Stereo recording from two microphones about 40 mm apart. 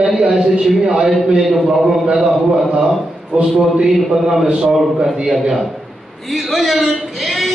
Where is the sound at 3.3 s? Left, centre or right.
Right.